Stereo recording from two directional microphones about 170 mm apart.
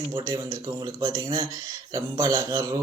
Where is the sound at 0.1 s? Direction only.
20° right (ahead or behind).